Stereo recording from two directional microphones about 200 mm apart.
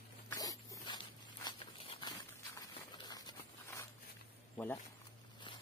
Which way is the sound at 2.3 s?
20° left (ahead or behind).